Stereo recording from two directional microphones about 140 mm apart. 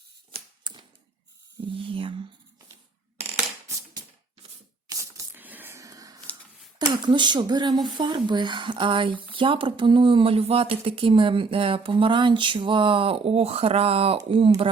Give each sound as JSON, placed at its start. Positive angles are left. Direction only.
{"t": 0.3, "sound": "typewriter", "side_deg": -35}
{"t": 1.6, "sound": "speech", "side_deg": -40}
{"t": 4.9, "sound": "a sound", "side_deg": -20}
{"t": 6.7, "sound": "speech", "side_deg": -30}